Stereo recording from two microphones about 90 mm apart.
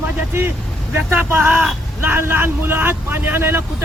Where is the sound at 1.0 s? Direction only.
25° right (ahead or behind).